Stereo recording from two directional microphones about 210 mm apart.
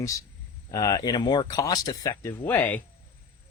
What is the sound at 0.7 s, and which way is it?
Speech, 15° left (ahead or behind).